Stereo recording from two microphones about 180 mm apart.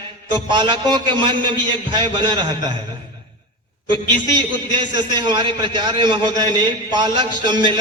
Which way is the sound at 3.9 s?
25° right (ahead or behind).